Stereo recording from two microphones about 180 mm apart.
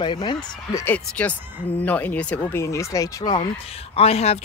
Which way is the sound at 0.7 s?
10° left (ahead or behind).